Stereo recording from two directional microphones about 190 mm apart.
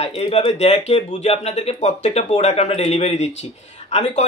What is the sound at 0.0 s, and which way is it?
Speech, 30° left (ahead or behind).